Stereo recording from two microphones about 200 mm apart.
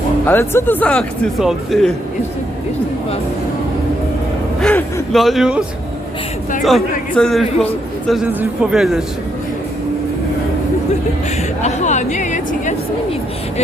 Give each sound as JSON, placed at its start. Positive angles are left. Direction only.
{"t": 0.3, "sound": "speech", "side_deg": 10}
{"t": 4.6, "sound": "a man's voice", "side_deg": 5}
{"t": 11.6, "sound": "speech", "side_deg": 35}